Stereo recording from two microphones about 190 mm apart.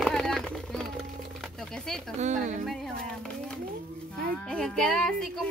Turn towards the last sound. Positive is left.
turn(degrees=5)  # may be behind; listen again after turning